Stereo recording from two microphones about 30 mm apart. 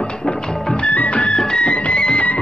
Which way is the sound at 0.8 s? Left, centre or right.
Left.